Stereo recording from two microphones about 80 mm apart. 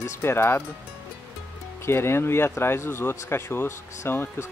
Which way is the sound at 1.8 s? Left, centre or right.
Left.